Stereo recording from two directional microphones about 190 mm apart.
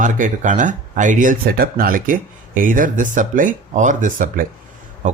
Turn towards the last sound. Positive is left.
turn(degrees=-40)  # may be behind; listen again after turning